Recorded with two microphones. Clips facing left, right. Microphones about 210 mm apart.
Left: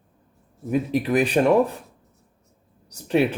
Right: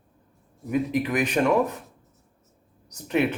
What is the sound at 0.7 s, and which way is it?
Speech, 30° left (ahead or behind).